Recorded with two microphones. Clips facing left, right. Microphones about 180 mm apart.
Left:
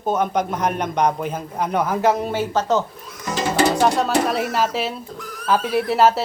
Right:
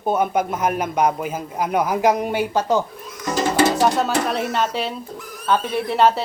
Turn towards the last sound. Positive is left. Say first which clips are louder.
# left 1 dB
turn(degrees=5)  # may be behind; listen again after turning